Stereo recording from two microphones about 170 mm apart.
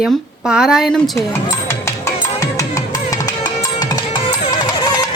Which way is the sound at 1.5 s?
15° left (ahead or behind).